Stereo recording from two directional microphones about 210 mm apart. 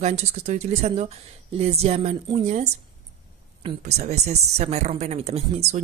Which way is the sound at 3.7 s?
30° right (ahead or behind).